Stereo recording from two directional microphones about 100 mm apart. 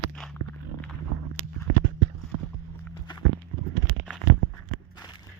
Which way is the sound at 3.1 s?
50° left (ahead or behind).